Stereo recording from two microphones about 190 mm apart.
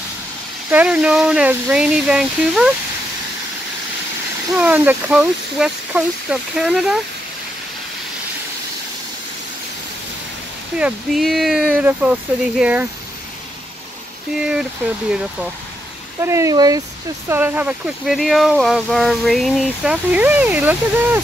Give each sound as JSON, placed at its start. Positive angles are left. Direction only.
{"t": 0.7, "sound": "speech", "side_deg": -5}
{"t": 4.6, "sound": "speech", "side_deg": -10}
{"t": 10.8, "sound": "speech", "side_deg": 0}
{"t": 14.4, "sound": "speech", "side_deg": -5}
{"t": 16.2, "sound": "speech", "side_deg": -15}